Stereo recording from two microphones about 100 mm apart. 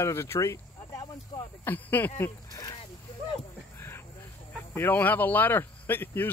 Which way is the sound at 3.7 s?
25° left (ahead or behind).